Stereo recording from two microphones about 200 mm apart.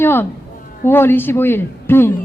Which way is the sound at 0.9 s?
10° left (ahead or behind).